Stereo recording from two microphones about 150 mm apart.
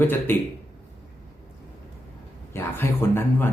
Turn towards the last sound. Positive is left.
turn(degrees=15)  # may be behind; listen again after turning